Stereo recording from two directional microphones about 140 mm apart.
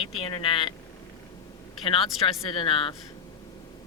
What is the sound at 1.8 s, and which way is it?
Speech, 35° left (ahead or behind).